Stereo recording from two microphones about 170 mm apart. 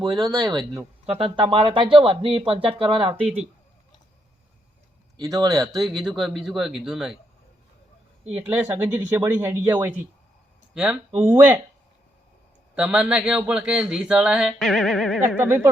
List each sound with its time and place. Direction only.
0.0 s speech: 25° right (ahead or behind)
1.0 s speech: 35° right (ahead or behind)
5.3 s speech: 20° right (ahead or behind)
6.1 s speech: centre (ahead or behind)
8.2 s speech: 40° right (ahead or behind)
8.4 s speech: 10° right (ahead or behind)
12.7 s speech: 5° right (ahead or behind)
15.4 s speech: 10° right (ahead or behind)